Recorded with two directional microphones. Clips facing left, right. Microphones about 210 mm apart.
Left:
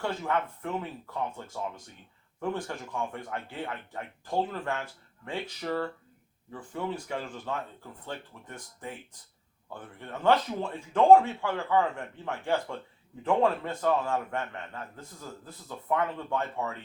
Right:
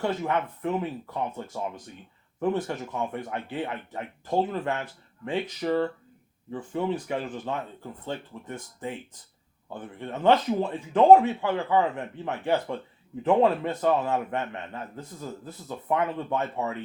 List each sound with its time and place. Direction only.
0.0 s speech: 20° right (ahead or behind)